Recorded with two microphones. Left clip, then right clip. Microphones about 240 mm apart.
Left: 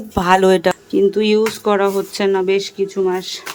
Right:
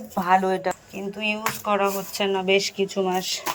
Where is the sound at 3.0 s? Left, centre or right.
Left.